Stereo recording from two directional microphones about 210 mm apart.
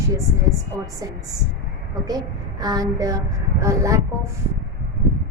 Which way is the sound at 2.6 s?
15° right (ahead or behind).